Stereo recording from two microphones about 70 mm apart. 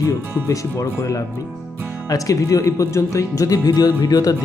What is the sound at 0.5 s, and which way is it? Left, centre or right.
Speech, left.